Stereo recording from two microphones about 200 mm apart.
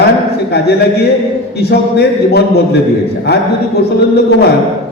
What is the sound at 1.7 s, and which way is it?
Speech, 55° left (ahead or behind).